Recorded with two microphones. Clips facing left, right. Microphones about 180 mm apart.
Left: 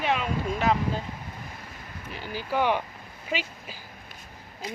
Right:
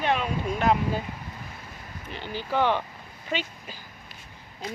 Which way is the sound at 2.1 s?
5° left (ahead or behind).